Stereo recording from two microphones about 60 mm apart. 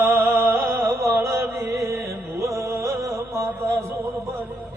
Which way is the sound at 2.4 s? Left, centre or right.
Right.